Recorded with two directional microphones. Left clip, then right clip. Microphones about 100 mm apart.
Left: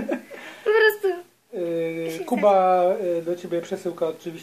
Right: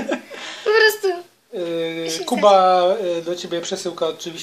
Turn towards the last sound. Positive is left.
turn(degrees=5)  # may be behind; listen again after turning